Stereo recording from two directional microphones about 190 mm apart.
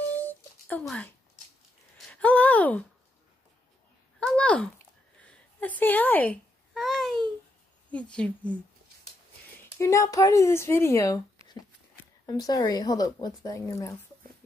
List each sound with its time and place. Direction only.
0.2 s a sound: 10° left (ahead or behind)
4.2 s a sound: 5° left (ahead or behind)
5.6 s babbling: 10° left (ahead or behind)
7.9 s speech: 5° left (ahead or behind)
9.8 s speech: 15° left (ahead or behind)
12.3 s speech: 20° left (ahead or behind)